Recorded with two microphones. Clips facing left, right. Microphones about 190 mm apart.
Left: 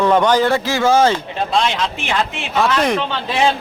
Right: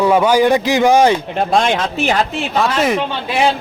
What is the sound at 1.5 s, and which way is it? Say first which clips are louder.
A man's voice: right 3 dB; 50° right (ahead or behind).